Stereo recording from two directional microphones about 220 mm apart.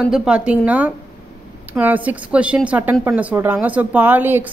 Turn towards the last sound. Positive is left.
turn(degrees=-10)  # may be behind; listen again after turning